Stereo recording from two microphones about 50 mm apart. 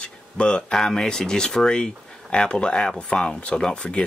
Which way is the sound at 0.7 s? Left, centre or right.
Centre.